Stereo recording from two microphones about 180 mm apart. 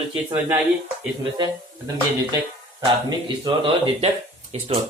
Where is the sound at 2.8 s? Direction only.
25° right (ahead or behind).